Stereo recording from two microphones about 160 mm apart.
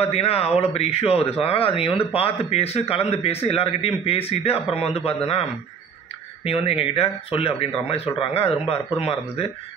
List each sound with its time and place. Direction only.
0.0 s speech: 40° left (ahead or behind)
6.4 s speech: 35° left (ahead or behind)